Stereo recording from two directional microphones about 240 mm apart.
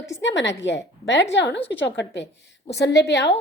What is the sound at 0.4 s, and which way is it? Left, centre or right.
A woman's voice, left.